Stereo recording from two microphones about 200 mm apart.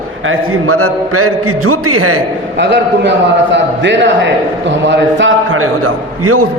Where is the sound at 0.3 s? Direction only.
90° right.